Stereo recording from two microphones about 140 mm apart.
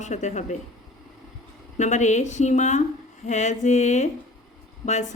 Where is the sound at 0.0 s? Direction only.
55° left (ahead or behind).